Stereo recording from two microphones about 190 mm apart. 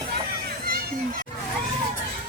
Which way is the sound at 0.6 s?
50° right (ahead or behind).